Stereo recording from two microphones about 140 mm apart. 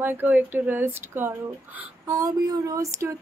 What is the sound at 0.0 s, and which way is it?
A woman's voice, 15° right (ahead or behind).